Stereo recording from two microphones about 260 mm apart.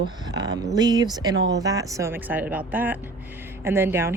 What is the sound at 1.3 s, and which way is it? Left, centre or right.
Speech, right.